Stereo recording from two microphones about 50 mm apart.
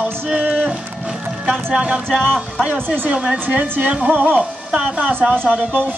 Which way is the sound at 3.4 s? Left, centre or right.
Right.